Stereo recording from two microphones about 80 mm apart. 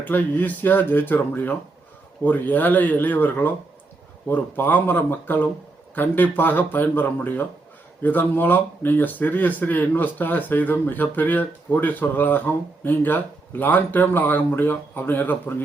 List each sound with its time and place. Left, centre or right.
0.0 s speech: left